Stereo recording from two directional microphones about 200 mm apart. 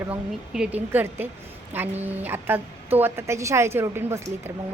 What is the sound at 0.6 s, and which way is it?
A woman's voice, 10° right (ahead or behind).